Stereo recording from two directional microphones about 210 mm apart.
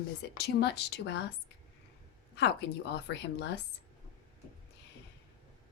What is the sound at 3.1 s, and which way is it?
Speech, 55° left (ahead or behind).